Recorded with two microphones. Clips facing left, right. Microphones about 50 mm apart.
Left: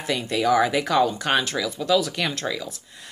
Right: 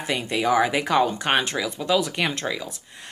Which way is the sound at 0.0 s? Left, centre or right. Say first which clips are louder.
Left 1 dB; right.